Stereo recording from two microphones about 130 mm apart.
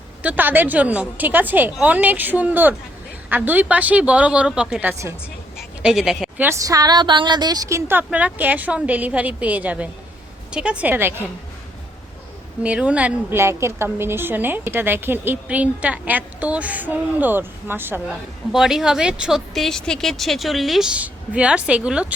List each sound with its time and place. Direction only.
0.2 s a woman's voice: 10° right (ahead or behind)
5.5 s a sound: 5° right (ahead or behind)
6.4 s a woman's voice: 25° right (ahead or behind)
12.6 s a woman's voice: 10° right (ahead or behind)
13.4 s a woman's voice: 20° right (ahead or behind)
18.5 s speech: centre (ahead or behind)